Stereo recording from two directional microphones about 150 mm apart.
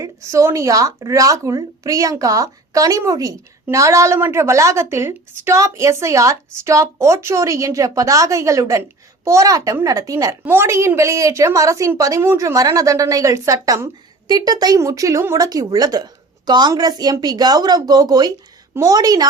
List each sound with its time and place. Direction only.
0.0 s speech: 20° right (ahead or behind)